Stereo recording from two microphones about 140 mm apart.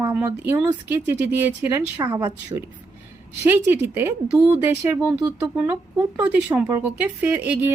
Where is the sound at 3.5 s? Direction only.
15° right (ahead or behind).